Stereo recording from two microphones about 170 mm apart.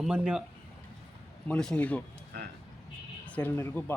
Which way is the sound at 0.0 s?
5° right (ahead or behind).